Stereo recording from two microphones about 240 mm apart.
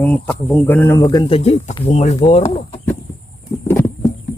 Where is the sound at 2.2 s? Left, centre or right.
Left.